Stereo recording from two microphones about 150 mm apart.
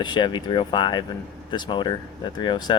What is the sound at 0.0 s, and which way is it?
Speech, 30° left (ahead or behind).